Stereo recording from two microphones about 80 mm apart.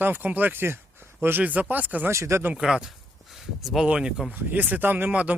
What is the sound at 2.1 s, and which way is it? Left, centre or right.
Speech, right.